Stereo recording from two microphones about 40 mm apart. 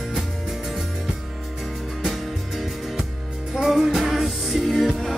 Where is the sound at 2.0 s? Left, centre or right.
Centre.